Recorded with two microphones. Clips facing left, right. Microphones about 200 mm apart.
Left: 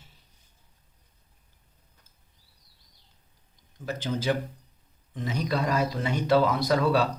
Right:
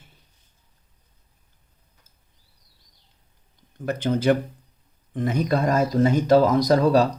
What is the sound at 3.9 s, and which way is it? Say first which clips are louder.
Speech: right 7 dB; 55° right (ahead or behind).